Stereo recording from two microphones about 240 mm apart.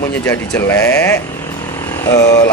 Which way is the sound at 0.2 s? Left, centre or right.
Centre.